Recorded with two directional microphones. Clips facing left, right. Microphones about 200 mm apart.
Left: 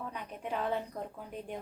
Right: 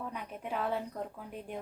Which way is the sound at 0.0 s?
5° right (ahead or behind).